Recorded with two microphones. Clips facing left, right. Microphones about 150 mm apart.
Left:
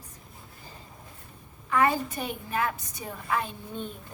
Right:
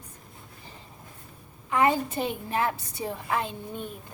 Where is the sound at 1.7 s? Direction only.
20° right (ahead or behind).